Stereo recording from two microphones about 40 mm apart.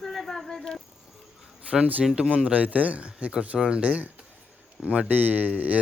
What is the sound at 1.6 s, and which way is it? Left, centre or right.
Speech, right.